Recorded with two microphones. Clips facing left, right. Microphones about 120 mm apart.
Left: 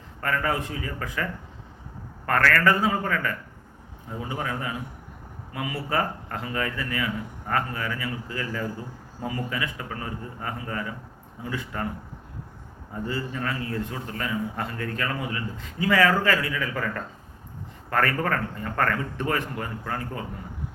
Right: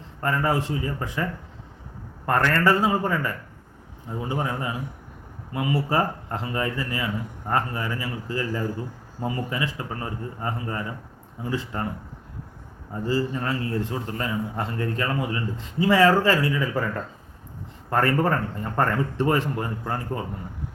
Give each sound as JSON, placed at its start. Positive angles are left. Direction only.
{"t": 0.2, "sound": "a man's voice", "side_deg": -25}
{"t": 13.1, "sound": "a man's voice", "side_deg": -25}